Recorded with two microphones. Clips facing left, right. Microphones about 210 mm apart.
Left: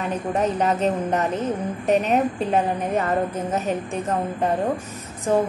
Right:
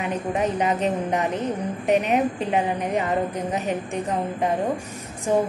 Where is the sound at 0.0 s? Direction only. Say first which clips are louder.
Left 1 dB; 10° right (ahead or behind).